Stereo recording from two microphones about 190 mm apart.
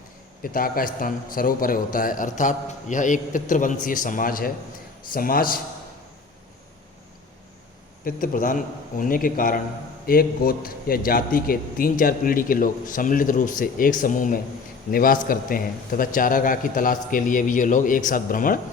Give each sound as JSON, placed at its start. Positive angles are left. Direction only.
{"t": 0.4, "sound": "a man's voice", "side_deg": 50}
{"t": 8.0, "sound": "a man's voice", "side_deg": 45}